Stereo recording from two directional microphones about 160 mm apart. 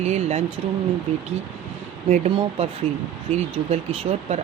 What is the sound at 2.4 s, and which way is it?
Speech, 35° right (ahead or behind).